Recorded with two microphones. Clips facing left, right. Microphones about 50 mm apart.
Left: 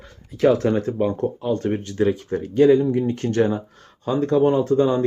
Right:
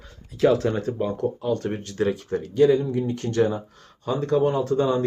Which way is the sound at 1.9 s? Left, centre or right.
Centre.